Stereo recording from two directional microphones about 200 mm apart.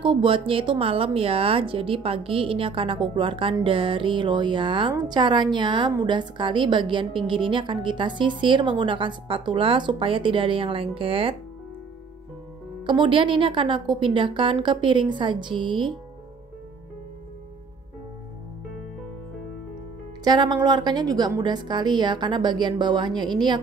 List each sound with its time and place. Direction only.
0.0 s speech: 25° right (ahead or behind)
12.8 s speech: 25° right (ahead or behind)
20.2 s speech: 20° right (ahead or behind)